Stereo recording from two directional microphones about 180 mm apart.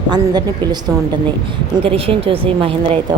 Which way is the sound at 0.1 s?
25° right (ahead or behind).